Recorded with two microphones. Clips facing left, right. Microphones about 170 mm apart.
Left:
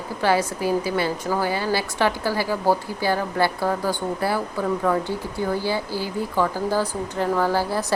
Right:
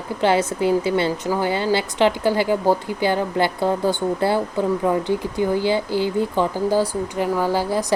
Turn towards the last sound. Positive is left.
turn(degrees=-15)  # may be behind; listen again after turning